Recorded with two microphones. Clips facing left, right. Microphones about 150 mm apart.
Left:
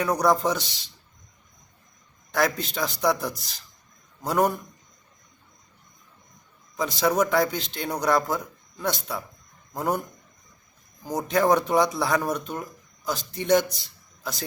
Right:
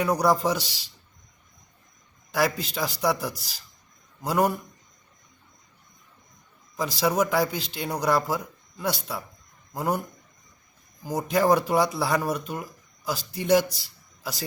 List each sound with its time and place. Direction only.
0.0 s speech: 10° right (ahead or behind)
2.3 s speech: 5° right (ahead or behind)
6.7 s speech: 5° right (ahead or behind)
11.0 s speech: 5° right (ahead or behind)
13.7 s a sound: 10° right (ahead or behind)